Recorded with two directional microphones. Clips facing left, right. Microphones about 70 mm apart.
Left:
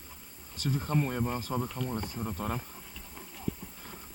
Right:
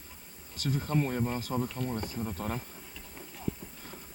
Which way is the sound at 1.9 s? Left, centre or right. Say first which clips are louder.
Even; left.